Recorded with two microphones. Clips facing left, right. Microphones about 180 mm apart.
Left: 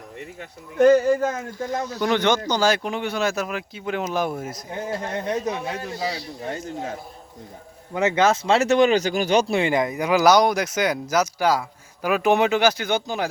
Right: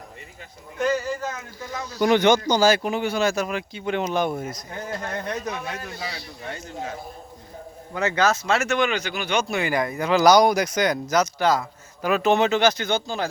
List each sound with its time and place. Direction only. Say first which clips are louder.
0.8 s speech: left 9 dB; 55° left (ahead or behind)
2.0 s speech: right 4 dB; 10° right (ahead or behind)
4.9 s speech: left 3 dB; 25° left (ahead or behind)
6.5 s speech: left 3 dB; 45° left (ahead or behind)
7.9 s speech: left 3 dB; 25° left (ahead or behind)